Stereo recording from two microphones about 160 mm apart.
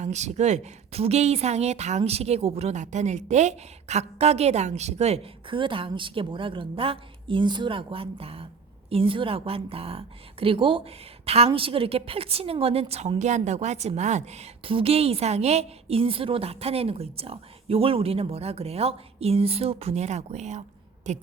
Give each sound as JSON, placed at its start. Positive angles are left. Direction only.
{"t": 0.0, "sound": "a woman's voice", "side_deg": -45}